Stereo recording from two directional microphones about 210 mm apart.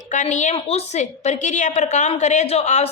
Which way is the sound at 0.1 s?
35° left (ahead or behind).